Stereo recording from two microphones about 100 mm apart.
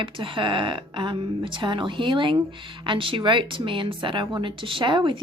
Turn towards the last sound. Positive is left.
turn(degrees=-55)  # may be behind; listen again after turning